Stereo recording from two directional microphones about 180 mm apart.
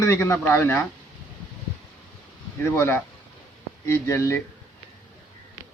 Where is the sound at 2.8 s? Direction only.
10° left (ahead or behind).